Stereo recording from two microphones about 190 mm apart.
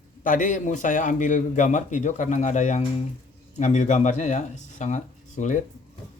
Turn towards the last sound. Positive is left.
turn(degrees=40)  # may be behind; listen again after turning